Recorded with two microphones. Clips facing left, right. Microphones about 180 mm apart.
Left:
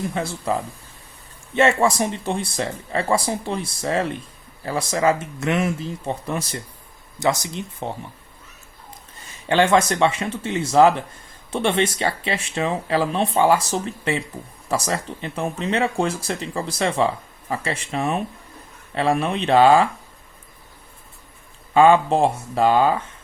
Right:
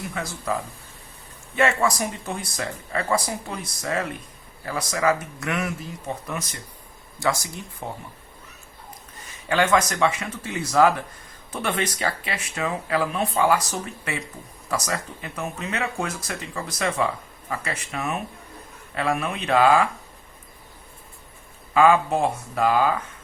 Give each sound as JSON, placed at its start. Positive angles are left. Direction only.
{"t": 0.1, "sound": "speech", "side_deg": 30}
{"t": 1.5, "sound": "speech", "side_deg": 25}
{"t": 7.2, "sound": "speech", "side_deg": 20}
{"t": 9.5, "sound": "speech", "side_deg": 30}
{"t": 21.7, "sound": "speech", "side_deg": 30}